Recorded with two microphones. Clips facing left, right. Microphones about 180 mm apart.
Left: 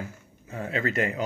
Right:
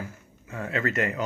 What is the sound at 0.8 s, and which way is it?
Speech, 35° left (ahead or behind).